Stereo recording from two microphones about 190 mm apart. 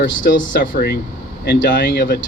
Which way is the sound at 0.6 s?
50° left (ahead or behind).